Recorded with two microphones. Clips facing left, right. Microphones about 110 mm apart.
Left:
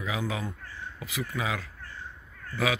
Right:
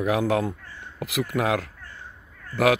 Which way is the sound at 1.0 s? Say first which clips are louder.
Right 8 dB; 85° right.